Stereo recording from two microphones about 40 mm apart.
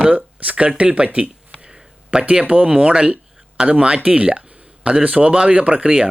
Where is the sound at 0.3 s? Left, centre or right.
Right.